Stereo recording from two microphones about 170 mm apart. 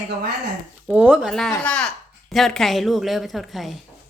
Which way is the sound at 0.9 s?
5° right (ahead or behind).